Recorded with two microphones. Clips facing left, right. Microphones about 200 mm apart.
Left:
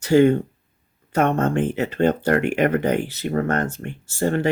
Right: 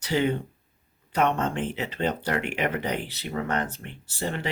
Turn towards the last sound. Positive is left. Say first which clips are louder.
# left 10 dB
turn(degrees=50)  # may be behind; listen again after turning